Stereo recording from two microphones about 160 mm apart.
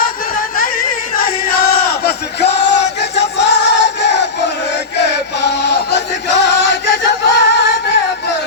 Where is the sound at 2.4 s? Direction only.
90° left.